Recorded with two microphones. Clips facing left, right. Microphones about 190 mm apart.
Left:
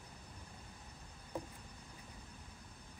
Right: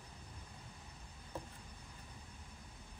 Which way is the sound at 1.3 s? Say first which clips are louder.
Left 3 dB; 15° left (ahead or behind).